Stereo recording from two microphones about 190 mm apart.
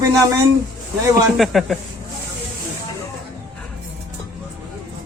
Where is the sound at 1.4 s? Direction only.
Centre (ahead or behind).